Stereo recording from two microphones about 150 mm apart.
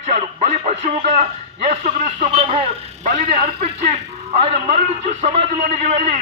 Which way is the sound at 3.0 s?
55° right (ahead or behind).